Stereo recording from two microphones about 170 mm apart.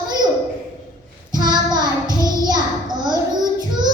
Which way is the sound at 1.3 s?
25° right (ahead or behind).